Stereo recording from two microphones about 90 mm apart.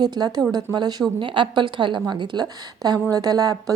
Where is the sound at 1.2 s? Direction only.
65° right (ahead or behind).